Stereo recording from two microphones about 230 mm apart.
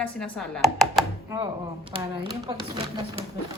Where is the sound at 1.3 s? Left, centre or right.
Right.